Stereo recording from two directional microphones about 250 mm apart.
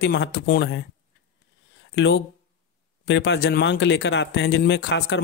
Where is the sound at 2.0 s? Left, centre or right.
Left.